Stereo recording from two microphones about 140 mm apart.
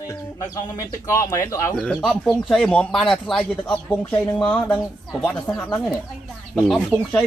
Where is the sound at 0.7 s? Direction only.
20° left (ahead or behind).